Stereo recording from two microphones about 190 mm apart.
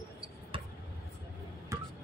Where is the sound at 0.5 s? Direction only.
25° right (ahead or behind).